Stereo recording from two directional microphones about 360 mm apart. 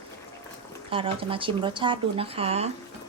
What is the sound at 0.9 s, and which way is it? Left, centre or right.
Speech, centre.